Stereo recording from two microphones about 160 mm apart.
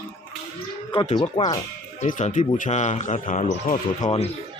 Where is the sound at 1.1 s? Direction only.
25° left (ahead or behind).